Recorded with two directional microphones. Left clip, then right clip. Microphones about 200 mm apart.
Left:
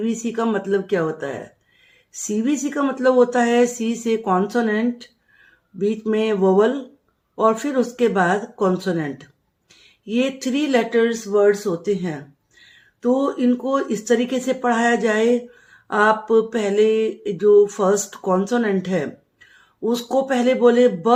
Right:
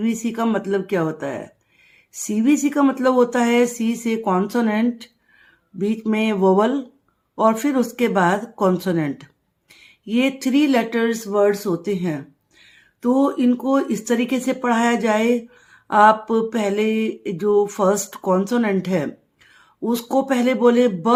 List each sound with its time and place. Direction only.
0.0 s speech: 25° right (ahead or behind)